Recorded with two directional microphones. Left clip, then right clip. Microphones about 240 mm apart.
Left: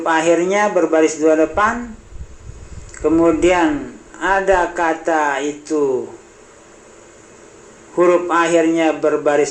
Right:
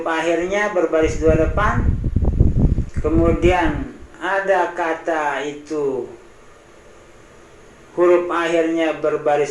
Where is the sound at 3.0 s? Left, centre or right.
Left.